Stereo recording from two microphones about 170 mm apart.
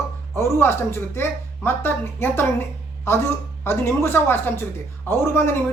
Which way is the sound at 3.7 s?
15° left (ahead or behind).